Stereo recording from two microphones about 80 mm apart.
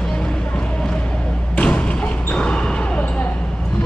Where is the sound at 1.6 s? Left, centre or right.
Centre.